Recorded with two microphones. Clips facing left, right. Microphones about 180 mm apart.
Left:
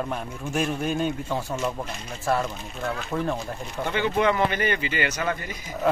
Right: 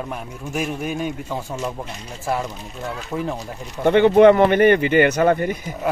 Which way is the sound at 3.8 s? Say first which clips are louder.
Right 12 dB; 60° right (ahead or behind).